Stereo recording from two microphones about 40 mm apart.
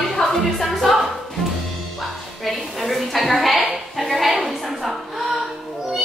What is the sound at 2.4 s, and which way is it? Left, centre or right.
A woman's voice, centre.